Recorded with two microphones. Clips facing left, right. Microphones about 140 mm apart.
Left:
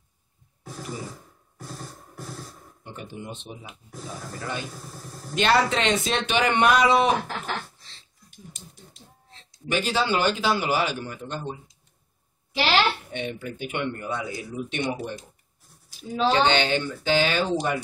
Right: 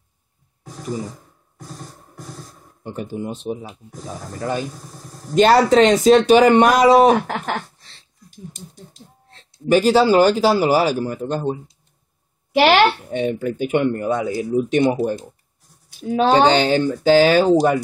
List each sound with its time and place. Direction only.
2.8 s speech: 40° right (ahead or behind)
7.2 s speech: 70° right (ahead or behind)
9.7 s speech: 40° right (ahead or behind)
12.5 s speech: 60° right (ahead or behind)
13.1 s speech: 40° right (ahead or behind)
16.1 s speech: 65° right (ahead or behind)
16.4 s speech: 40° right (ahead or behind)